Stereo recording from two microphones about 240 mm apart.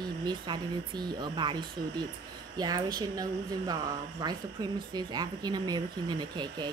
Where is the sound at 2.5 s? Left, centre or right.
Centre.